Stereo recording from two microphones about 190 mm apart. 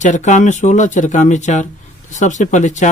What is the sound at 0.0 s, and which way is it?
Speech, 40° left (ahead or behind).